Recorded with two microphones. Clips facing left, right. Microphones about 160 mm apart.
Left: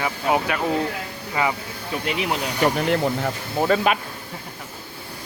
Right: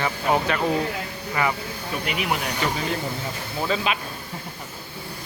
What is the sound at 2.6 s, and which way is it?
Speech, 65° left (ahead or behind).